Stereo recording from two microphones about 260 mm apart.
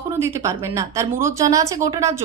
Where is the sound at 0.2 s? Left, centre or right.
Centre.